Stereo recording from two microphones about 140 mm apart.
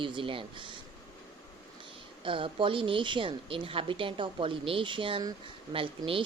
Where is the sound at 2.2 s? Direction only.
40° right (ahead or behind).